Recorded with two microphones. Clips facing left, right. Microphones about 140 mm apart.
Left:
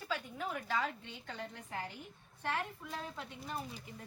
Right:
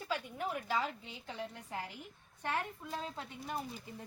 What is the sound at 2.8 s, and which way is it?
Speech, 20° right (ahead or behind).